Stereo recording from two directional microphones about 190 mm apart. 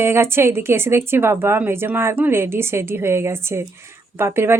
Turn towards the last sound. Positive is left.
turn(degrees=-15)  # may be behind; listen again after turning